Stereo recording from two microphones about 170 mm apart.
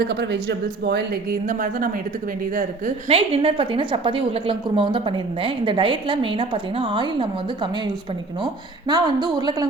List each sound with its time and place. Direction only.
0.0 s speech: 80° right
1.5 s a woman's voice: 50° right (ahead or behind)
3.1 s a woman's voice: 35° right (ahead or behind)
8.9 s a woman's voice: 25° right (ahead or behind)